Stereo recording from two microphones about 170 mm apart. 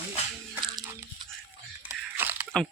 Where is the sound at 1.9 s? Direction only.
10° right (ahead or behind).